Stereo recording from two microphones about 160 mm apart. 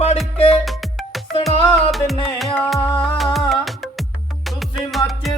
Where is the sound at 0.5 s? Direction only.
Centre (ahead or behind).